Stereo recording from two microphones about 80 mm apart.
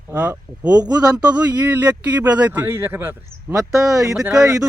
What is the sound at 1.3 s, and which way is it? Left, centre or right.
Speech, right.